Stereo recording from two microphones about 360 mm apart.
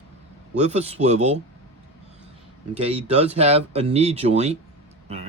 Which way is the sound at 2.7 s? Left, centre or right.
Centre.